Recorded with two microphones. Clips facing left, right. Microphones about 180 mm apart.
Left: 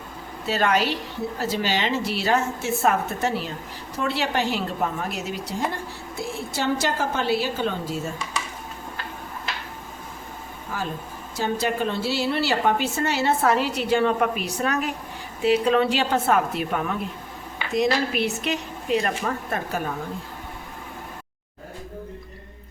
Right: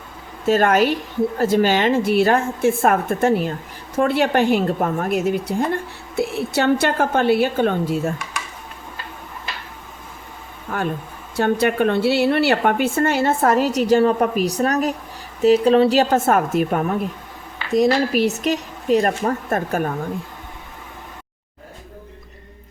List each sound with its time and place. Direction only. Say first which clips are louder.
0.4 s a woman's voice: right 7 dB; 50° right (ahead or behind)
10.7 s a woman's voice: right 6 dB; 60° right (ahead or behind)